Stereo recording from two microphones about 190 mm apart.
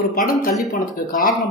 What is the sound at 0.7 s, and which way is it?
Speech, 45° left (ahead or behind).